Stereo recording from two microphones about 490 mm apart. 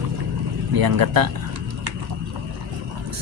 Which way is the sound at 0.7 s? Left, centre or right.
Right.